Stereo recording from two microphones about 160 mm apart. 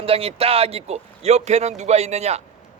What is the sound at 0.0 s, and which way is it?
A man's voice, 35° right (ahead or behind).